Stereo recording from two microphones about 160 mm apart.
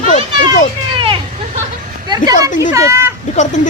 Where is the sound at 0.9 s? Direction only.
35° right (ahead or behind).